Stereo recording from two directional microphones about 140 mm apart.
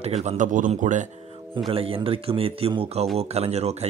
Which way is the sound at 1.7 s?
40° right (ahead or behind).